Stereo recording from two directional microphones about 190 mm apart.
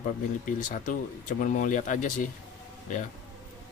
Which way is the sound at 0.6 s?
45° left (ahead or behind).